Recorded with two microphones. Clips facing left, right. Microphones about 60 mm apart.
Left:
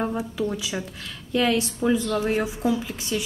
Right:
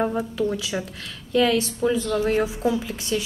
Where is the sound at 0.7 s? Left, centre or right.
Centre.